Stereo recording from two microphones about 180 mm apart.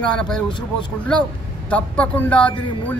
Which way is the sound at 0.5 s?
25° left (ahead or behind).